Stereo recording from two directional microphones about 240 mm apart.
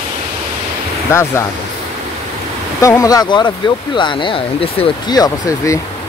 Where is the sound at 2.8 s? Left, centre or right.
Centre.